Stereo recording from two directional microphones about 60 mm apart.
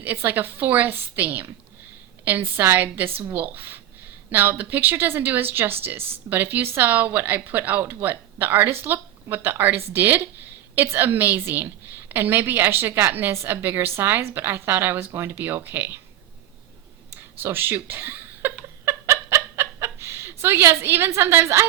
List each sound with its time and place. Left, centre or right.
0.0 s a woman's voice: right
17.4 s speech: right
18.9 s fowl: right
20.8 s a woman's voice: right